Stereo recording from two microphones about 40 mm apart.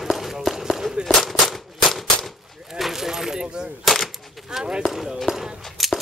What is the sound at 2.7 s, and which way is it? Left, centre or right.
Keys jangling, centre.